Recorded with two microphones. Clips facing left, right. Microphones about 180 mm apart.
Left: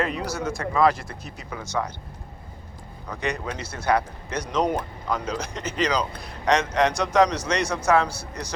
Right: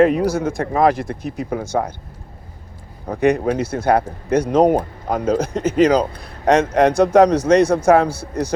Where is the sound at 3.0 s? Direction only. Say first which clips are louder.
Right 13 dB; 55° right (ahead or behind).